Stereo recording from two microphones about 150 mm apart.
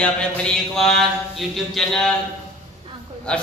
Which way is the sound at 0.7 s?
Centre (ahead or behind).